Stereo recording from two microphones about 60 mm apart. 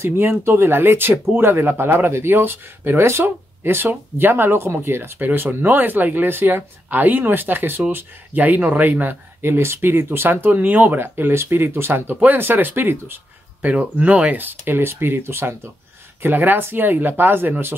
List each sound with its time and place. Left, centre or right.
0.0 s speech: right
16.2 s speech: right